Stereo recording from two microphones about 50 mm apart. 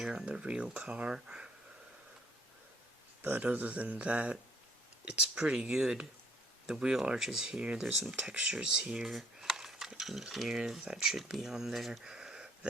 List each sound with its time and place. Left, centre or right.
0.3 s speech: centre
3.3 s speech: right
5.8 s speech: centre
8.3 s speech: centre
9.0 s mechanisms: centre
10.6 s speech: centre